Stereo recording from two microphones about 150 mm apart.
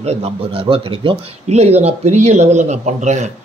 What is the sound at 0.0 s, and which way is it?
A man's voice, 45° right (ahead or behind).